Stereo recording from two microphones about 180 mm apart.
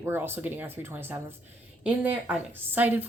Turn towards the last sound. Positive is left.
turn(degrees=-10)  # may be behind; listen again after turning